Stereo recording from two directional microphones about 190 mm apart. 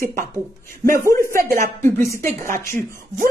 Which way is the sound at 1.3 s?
45° right (ahead or behind).